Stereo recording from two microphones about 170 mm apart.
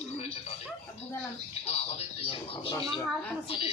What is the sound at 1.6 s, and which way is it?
A woman's voice, 40° left (ahead or behind).